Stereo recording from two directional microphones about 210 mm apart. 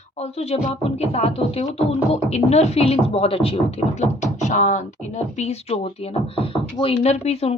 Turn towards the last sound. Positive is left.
turn(degrees=30)  # may be behind; listen again after turning